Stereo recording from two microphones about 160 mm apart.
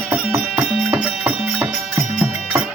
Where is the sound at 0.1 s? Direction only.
10° right (ahead or behind).